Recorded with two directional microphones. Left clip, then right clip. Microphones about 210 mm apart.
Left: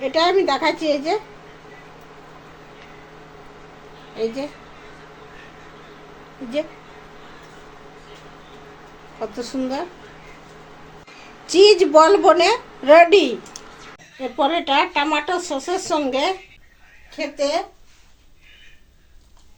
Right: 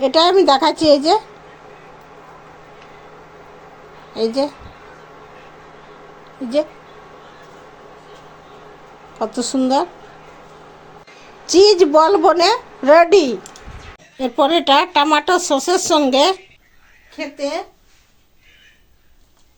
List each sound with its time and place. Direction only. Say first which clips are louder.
0.0 s a woman's voice: right 5 dB; 35° right (ahead or behind)
9.1 s a woman's voice: right 7 dB; 30° right (ahead or behind)
11.5 s a woman's voice: right 1 dB; 25° right (ahead or behind)
14.2 s speech: right 5 dB; 50° right (ahead or behind)
17.2 s speech: left 2 dB; centre (ahead or behind)